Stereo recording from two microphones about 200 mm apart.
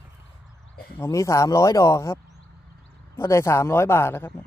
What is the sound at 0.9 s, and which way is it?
Speech, 15° left (ahead or behind).